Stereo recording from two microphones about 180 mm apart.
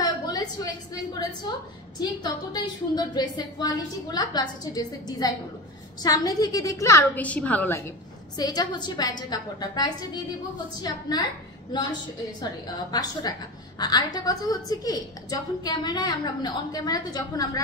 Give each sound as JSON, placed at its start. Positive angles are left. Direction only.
{"t": 0.0, "sound": "a sound", "side_deg": 20}
{"t": 2.0, "sound": "a woman's voice", "side_deg": 25}
{"t": 8.4, "sound": "a woman's voice", "side_deg": 20}
{"t": 12.4, "sound": "a woman's voice", "side_deg": 20}